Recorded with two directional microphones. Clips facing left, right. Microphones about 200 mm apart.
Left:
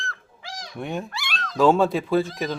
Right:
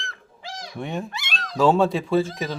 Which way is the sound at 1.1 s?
20° right (ahead or behind).